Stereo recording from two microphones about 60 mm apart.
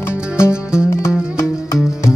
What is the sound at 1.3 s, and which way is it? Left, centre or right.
Music, left.